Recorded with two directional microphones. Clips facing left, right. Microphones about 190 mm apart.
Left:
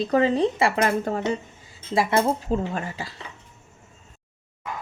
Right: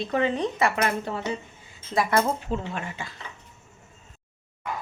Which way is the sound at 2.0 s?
25° left (ahead or behind).